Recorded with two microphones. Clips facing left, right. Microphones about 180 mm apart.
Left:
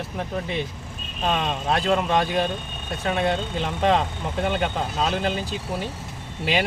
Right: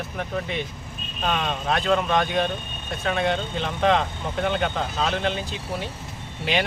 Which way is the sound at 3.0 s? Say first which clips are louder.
Left 1 dB; 35° left (ahead or behind).